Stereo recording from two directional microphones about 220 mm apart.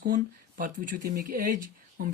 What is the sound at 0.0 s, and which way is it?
Speech, 40° right (ahead or behind).